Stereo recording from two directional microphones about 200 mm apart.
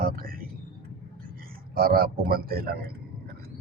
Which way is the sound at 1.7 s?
50° right (ahead or behind).